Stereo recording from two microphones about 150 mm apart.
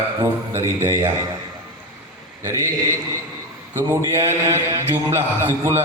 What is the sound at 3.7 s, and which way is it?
A man's voice, 20° right (ahead or behind).